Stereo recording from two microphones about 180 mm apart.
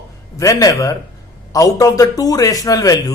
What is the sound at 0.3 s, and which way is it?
A man's voice, 20° left (ahead or behind).